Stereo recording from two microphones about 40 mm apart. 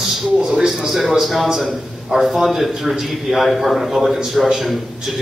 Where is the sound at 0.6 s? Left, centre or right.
Centre.